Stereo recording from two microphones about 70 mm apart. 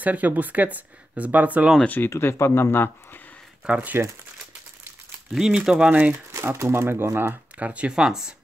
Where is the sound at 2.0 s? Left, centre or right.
Left.